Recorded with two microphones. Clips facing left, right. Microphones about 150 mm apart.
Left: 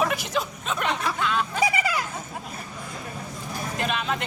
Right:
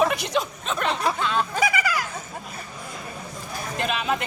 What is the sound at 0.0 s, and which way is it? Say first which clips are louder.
Speech: right 3 dB; centre (ahead or behind).